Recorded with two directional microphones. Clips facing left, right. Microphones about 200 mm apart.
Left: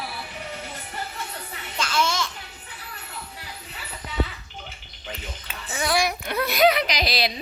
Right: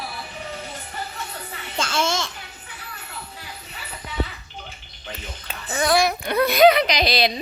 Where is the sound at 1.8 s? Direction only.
25° right (ahead or behind).